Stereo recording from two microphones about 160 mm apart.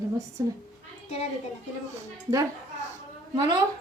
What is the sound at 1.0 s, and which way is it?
Speech, 40° left (ahead or behind).